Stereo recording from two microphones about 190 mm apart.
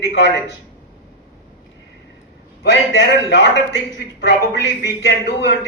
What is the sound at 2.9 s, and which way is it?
A man's voice, 70° left (ahead or behind).